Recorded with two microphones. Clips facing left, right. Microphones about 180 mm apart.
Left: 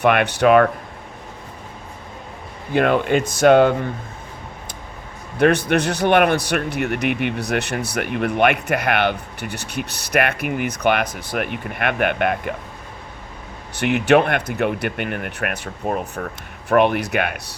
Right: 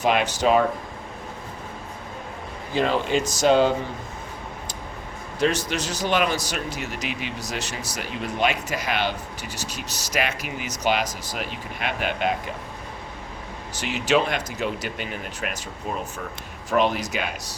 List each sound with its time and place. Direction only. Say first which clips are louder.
0.0 s a man's voice: left 5 dB; 60° left (ahead or behind)
2.7 s a man's voice: left 5 dB; 60° left (ahead or behind)
5.4 s a man's voice: left 7 dB; 60° left (ahead or behind)
13.7 s a man's voice: left 7 dB; 60° left (ahead or behind)